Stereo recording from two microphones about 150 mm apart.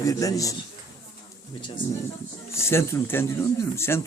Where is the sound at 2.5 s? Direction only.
15° left (ahead or behind).